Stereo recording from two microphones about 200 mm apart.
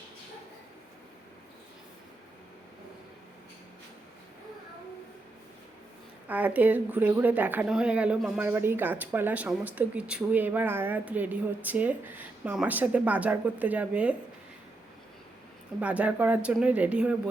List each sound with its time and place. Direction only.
6.2 s speech: 10° right (ahead or behind)
15.8 s speech: 5° right (ahead or behind)